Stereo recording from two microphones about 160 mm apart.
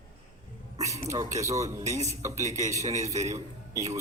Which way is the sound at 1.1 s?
20° right (ahead or behind).